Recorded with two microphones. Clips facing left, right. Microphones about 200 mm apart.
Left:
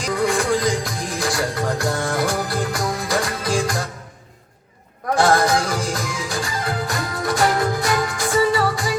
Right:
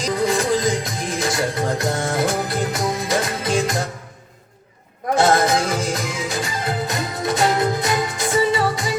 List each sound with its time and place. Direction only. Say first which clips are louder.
0.0 s music: right 1 dB; 20° right (ahead or behind)
5.1 s music: even; 20° right (ahead or behind)